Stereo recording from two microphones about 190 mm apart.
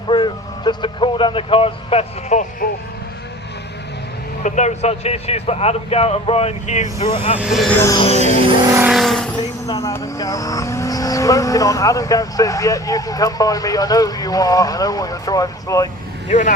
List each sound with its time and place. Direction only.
0.1 s speech: 25° left (ahead or behind); by 2.6 s 40° left (ahead or behind)
4.4 s speech: 40° left (ahead or behind)
7.3 s speech: centre (ahead or behind)
7.8 s music: 20° left (ahead or behind)
8.0 s speech: 35° left (ahead or behind)
8.7 s vehicle: 5° right (ahead or behind)
9.6 s speech: 20° left (ahead or behind)
16.3 s speech: 40° left (ahead or behind)